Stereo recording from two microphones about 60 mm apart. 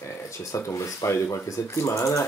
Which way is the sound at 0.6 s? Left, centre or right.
Left.